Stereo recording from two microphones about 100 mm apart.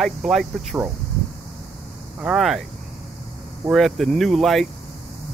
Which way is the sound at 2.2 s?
5° right (ahead or behind).